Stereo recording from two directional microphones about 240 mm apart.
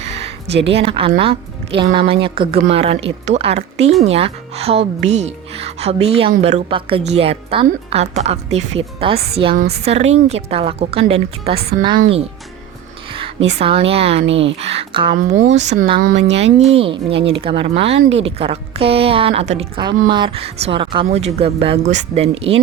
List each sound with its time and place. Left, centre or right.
0.0 s music: right
0.7 s speech: right
9.6 s speech: right
9.8 s speech: right
13.1 s music: right
13.6 s speech: right
15.2 s speech: right
15.7 s speech: right